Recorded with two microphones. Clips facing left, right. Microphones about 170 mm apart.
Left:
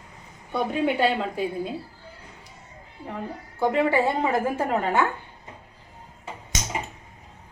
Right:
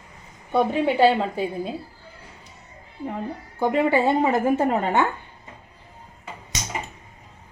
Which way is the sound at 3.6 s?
20° right (ahead or behind).